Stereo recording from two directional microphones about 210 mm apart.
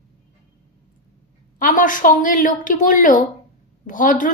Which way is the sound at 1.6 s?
40° left (ahead or behind).